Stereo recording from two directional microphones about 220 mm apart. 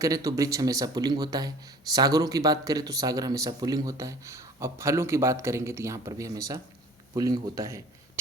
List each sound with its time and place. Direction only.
0.0 s speech: 15° right (ahead or behind)